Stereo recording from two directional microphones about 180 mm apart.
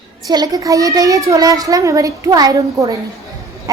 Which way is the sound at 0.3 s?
20° right (ahead or behind).